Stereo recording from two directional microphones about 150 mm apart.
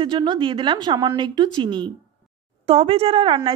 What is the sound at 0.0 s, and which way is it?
A woman's voice, 30° right (ahead or behind).